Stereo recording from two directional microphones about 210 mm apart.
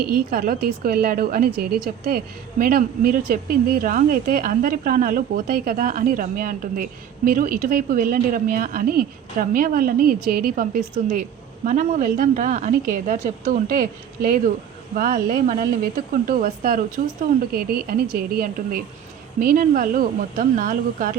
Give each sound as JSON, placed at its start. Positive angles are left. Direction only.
{"t": 0.1, "sound": "a woman's voice", "side_deg": -45}